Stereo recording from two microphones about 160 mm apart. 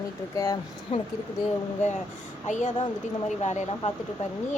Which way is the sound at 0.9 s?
35° left (ahead or behind).